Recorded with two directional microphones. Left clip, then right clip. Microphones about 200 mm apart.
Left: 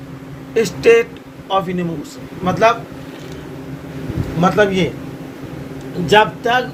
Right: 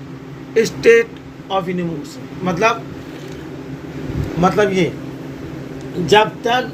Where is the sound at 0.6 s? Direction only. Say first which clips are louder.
Even; 20° left (ahead or behind).